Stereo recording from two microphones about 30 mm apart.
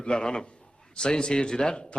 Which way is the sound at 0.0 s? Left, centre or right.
Left.